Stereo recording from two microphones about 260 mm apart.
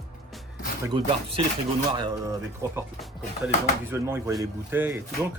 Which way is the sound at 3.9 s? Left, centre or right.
Centre.